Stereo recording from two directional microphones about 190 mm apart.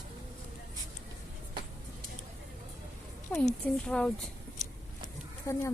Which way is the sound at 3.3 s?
5° left (ahead or behind).